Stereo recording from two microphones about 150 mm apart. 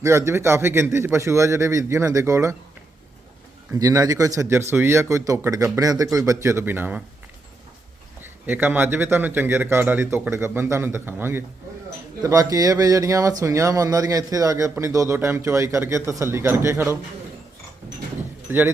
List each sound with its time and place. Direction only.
0.0 s a man's voice: 20° right (ahead or behind)
3.7 s a man's voice: 20° right (ahead or behind)
8.2 s a man's voice: 15° right (ahead or behind)
18.5 s a man's voice: 15° right (ahead or behind)